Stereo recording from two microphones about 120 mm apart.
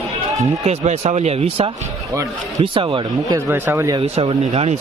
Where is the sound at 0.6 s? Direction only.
70° right (ahead or behind); by 1.7 s 55° right (ahead or behind).